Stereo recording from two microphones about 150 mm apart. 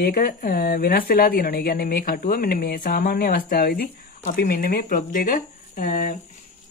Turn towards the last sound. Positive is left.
turn(degrees=65)  # may be behind; listen again after turning